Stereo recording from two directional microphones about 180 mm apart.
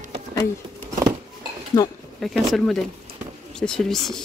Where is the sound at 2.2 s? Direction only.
Centre (ahead or behind).